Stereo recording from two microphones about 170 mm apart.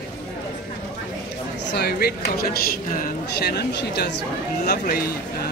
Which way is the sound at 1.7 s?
70° left (ahead or behind).